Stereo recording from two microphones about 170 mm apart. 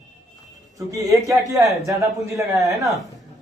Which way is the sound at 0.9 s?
20° right (ahead or behind).